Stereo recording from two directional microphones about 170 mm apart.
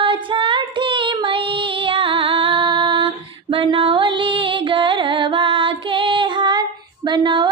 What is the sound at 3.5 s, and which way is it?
Music, 30° right (ahead or behind).